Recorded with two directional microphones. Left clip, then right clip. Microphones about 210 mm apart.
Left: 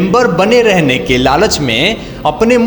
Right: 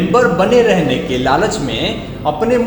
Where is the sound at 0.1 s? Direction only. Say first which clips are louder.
Left 2 dB; 25° left (ahead or behind).